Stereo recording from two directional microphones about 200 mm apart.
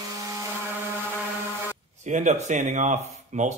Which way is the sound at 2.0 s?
35° right (ahead or behind).